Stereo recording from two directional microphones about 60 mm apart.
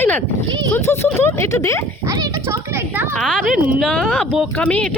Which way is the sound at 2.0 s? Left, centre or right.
Right.